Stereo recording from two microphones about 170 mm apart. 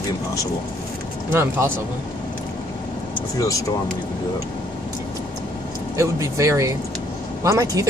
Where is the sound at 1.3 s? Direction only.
15° right (ahead or behind).